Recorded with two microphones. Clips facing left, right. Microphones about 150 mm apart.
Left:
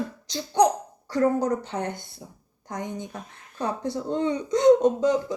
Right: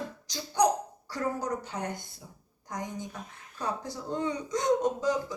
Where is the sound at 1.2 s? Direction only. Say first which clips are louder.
Left 9 dB; 25° left (ahead or behind).